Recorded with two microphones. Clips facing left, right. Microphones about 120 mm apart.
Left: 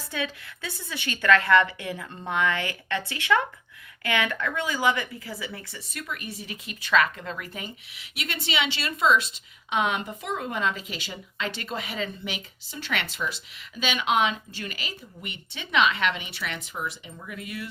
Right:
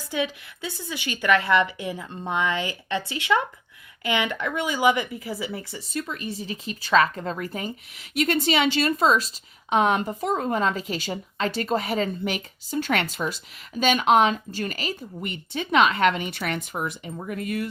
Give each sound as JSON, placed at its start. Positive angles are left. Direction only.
{"t": 0.1, "sound": "a woman's voice", "side_deg": -20}